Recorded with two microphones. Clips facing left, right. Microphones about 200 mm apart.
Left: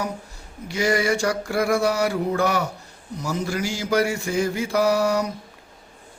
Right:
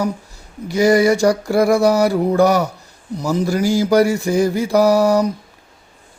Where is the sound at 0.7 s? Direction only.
35° right (ahead or behind).